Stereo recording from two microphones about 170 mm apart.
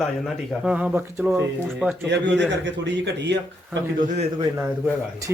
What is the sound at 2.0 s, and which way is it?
A man's voice, 90° right.